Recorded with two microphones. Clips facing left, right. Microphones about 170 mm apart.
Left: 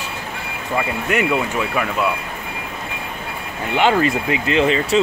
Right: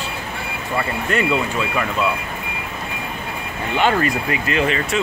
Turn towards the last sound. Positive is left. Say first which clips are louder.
# left 3 dB
turn(degrees=30)  # may be behind; listen again after turning